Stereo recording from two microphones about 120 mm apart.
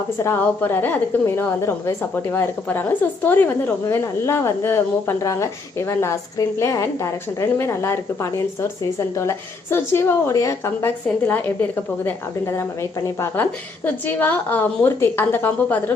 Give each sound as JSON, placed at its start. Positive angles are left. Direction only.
{"t": 0.2, "sound": "a woman's voice", "side_deg": 20}
{"t": 11.3, "sound": "a woman's voice", "side_deg": 15}